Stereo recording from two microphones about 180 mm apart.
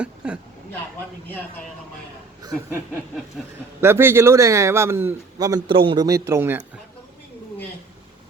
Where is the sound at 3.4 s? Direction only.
Centre (ahead or behind).